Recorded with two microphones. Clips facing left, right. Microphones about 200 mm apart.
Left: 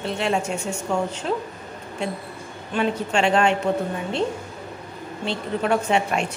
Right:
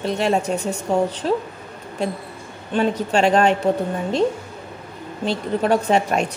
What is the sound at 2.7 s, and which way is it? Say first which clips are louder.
Speech: right 3 dB; 35° right (ahead or behind).